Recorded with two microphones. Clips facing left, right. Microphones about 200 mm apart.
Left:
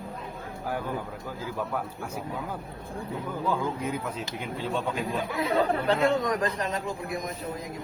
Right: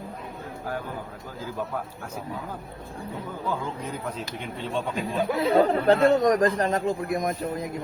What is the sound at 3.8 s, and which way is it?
Speech, 5° left (ahead or behind).